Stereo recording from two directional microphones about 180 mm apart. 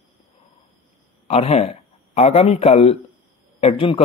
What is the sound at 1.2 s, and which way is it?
Speech, 35° left (ahead or behind).